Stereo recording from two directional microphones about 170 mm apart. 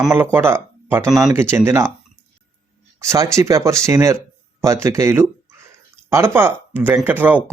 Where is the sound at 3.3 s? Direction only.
15° right (ahead or behind).